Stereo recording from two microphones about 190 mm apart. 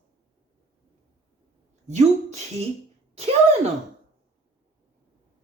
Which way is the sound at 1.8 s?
35° right (ahead or behind).